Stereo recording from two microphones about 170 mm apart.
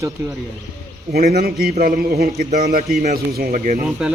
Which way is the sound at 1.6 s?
60° right (ahead or behind).